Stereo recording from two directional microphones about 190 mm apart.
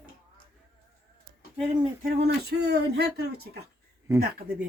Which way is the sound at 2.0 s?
55° right (ahead or behind).